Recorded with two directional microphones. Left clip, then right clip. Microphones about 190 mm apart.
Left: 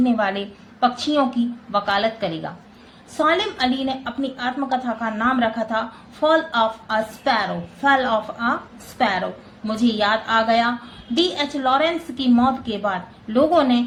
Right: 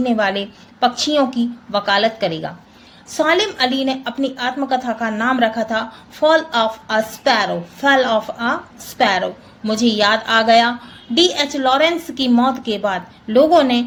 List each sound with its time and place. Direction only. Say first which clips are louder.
0.0 s a woman's voice: right 3 dB; 45° right (ahead or behind)